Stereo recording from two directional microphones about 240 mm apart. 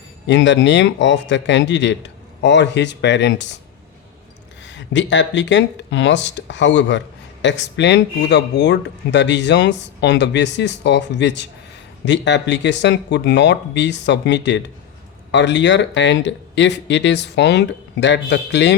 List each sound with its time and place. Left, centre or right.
0.3 s speech: left
4.6 s speech: left